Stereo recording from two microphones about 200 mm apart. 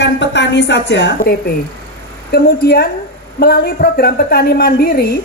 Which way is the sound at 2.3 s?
50° left (ahead or behind).